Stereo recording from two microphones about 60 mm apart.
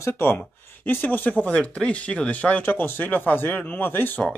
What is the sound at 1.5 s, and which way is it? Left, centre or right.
Speech, centre.